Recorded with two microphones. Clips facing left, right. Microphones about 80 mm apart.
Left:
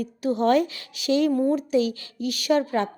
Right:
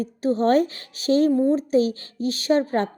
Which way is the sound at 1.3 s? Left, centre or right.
Right.